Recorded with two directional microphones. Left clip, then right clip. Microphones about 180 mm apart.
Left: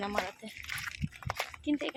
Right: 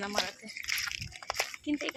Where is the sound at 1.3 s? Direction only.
10° left (ahead or behind).